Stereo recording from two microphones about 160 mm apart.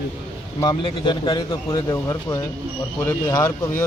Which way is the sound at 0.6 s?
30° left (ahead or behind).